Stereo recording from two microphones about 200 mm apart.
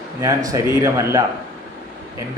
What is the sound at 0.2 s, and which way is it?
A man's voice, 15° right (ahead or behind).